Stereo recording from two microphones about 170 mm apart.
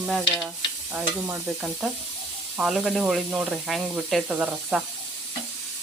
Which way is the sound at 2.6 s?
5° right (ahead or behind).